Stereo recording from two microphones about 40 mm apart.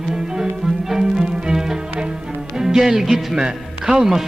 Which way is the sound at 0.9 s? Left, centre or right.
Centre.